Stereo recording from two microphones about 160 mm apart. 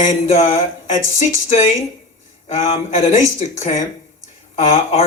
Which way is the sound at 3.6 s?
50° left (ahead or behind).